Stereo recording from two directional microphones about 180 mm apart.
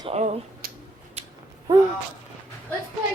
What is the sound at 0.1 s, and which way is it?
Speech, 40° right (ahead or behind).